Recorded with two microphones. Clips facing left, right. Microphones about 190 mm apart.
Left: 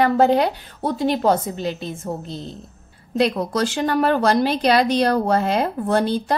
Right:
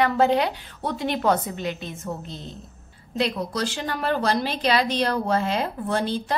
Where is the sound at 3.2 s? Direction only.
45° left (ahead or behind).